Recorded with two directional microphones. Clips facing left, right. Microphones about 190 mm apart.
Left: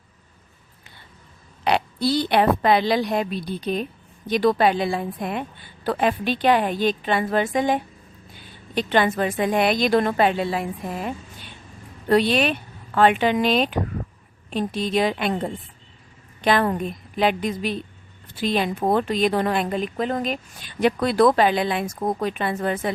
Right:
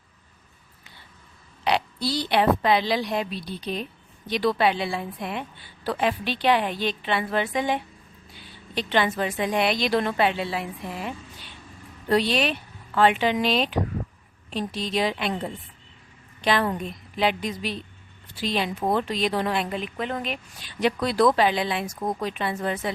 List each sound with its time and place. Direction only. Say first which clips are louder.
1.6 s a woman's voice: left 4 dB; 50° left (ahead or behind)